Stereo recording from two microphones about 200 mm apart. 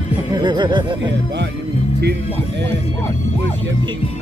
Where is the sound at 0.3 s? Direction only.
20° right (ahead or behind).